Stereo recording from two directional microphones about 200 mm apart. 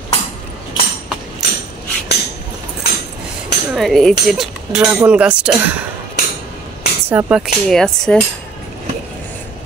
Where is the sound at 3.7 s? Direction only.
Centre (ahead or behind).